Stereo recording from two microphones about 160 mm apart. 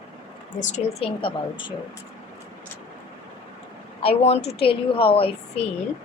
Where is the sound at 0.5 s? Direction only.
50° left (ahead or behind).